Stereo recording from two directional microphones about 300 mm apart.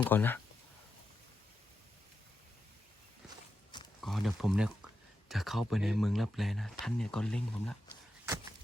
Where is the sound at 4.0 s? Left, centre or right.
Centre.